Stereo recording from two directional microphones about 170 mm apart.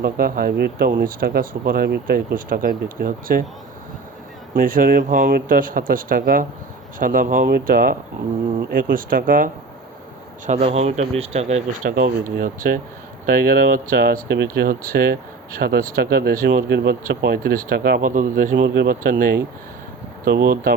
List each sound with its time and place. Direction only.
0.0 s speech: 60° right (ahead or behind)
4.5 s speech: 55° right (ahead or behind)
10.4 s speech: 40° right (ahead or behind)
18.5 s speech: 80° right; by 20.7 s 60° right (ahead or behind)